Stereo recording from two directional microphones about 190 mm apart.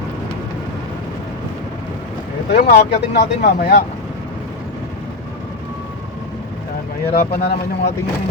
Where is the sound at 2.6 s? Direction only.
55° left (ahead or behind).